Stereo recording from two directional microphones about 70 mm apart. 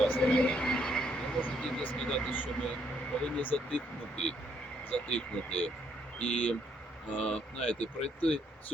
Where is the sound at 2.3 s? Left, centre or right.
Left.